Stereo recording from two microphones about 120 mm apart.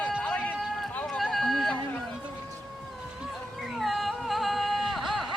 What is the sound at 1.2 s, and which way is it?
Run, centre (ahead or behind).